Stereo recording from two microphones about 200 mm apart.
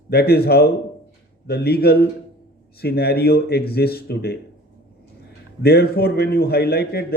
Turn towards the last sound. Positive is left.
turn(degrees=50)  # may be behind; listen again after turning